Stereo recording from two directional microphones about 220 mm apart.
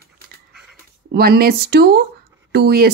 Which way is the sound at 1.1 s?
45° right (ahead or behind).